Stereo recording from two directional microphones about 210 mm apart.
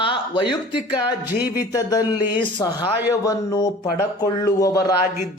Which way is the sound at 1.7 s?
20° left (ahead or behind).